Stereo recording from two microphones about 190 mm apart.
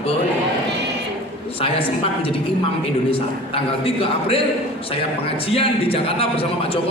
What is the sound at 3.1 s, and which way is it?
A man's voice, 30° left (ahead or behind).